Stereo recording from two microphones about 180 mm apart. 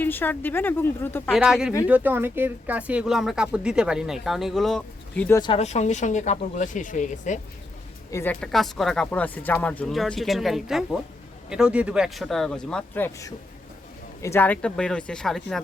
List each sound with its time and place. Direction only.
0.0 s a woman's voice: 10° left (ahead or behind)
1.3 s speech: 5° right (ahead or behind)
5.4 s speech: 35° left (ahead or behind)
8.1 s a woman's voice: 10° left (ahead or behind)